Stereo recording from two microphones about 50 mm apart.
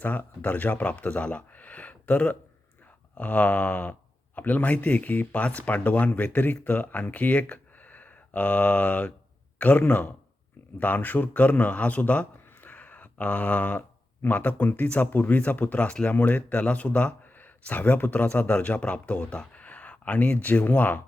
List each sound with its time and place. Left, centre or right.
0.0 s a man's voice: left
16.1 s speech: left
17.3 s speech: left